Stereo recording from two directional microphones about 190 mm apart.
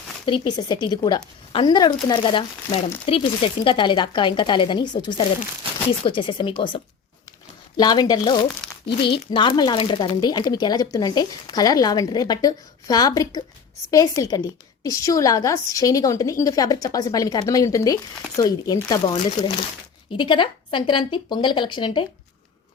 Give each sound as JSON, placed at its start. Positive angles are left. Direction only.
{"t": 0.3, "sound": "a woman's voice", "side_deg": 25}